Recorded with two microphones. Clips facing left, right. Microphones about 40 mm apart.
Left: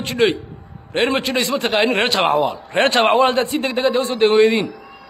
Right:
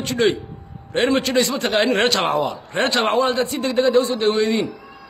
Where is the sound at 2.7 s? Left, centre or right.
Left.